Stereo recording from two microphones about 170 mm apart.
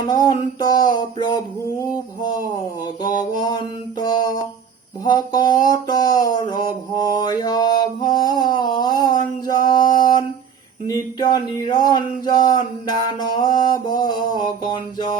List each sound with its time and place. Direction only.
0.1 s mantra: 20° left (ahead or behind)
3.0 s mantra: 25° left (ahead or behind)
9.9 s a sound: 25° left (ahead or behind)
10.8 s mantra: 25° left (ahead or behind)